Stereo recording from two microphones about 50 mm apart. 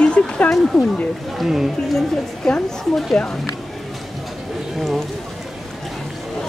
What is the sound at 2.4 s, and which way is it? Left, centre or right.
Speech, centre.